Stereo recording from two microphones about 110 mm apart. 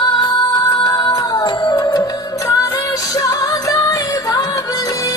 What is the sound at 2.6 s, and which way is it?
Music, 30° left (ahead or behind).